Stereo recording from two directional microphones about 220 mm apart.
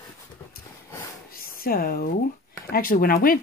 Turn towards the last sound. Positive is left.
turn(degrees=40)  # may be behind; listen again after turning